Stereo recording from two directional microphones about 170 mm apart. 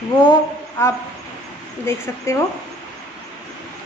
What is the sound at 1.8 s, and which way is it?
Speech, 15° left (ahead or behind).